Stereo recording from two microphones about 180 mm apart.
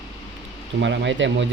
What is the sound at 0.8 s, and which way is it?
Speech, 85° right.